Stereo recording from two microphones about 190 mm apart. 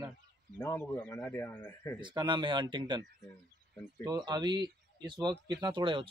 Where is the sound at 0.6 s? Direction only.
10° left (ahead or behind).